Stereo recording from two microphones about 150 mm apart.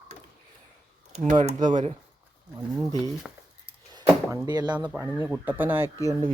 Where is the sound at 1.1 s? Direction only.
50° right (ahead or behind).